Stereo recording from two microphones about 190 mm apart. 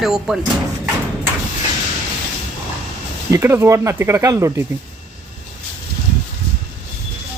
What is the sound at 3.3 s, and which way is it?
Speech, 15° right (ahead or behind).